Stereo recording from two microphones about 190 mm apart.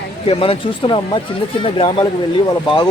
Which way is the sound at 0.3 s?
30° left (ahead or behind).